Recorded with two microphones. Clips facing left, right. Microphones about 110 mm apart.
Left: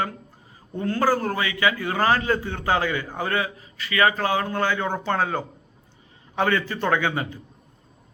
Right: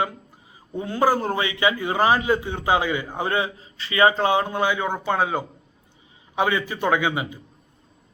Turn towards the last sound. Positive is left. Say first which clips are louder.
# right 1 dB
turn(degrees=-10)  # may be behind; listen again after turning